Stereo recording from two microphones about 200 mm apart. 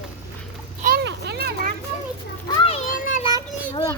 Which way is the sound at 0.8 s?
55° right (ahead or behind).